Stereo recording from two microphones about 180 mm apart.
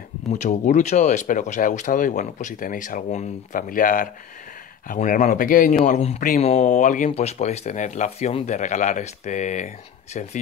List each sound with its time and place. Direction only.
0.3 s speech: 40° left (ahead or behind)